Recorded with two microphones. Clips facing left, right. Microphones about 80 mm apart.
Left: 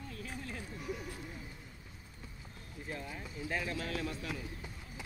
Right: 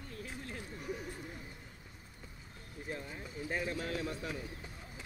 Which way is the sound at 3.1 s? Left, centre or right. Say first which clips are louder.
Left 1 dB; right.